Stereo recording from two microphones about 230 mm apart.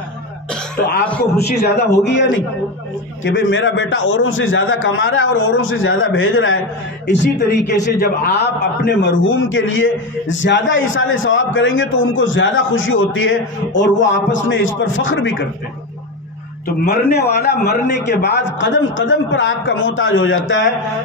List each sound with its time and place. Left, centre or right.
1.0 s a man's voice: centre
1.4 s a man's voice: left
7.1 s a man's voice: left
8.8 s a man's voice: left
16.8 s a man's voice: left